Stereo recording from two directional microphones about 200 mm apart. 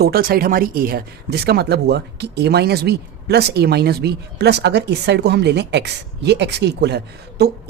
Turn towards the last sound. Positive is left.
turn(degrees=-55)  # may be behind; listen again after turning